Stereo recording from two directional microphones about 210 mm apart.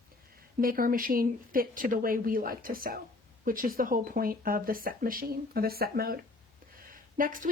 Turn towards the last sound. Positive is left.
turn(degrees=-40)  # may be behind; listen again after turning